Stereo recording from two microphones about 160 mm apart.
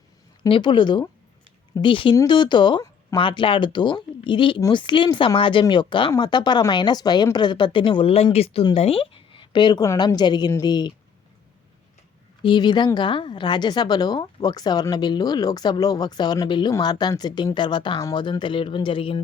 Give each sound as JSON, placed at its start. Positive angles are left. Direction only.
{"t": 0.4, "sound": "a woman's voice", "side_deg": 30}
{"t": 12.4, "sound": "a woman's voice", "side_deg": 30}